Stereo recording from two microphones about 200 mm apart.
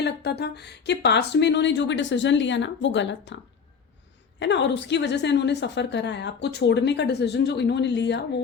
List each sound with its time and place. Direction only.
0.0 s a woman's voice: 55° left (ahead or behind)
4.4 s a woman's voice: 60° left (ahead or behind)